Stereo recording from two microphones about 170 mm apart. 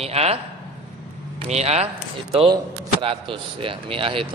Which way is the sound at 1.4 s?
40° right (ahead or behind).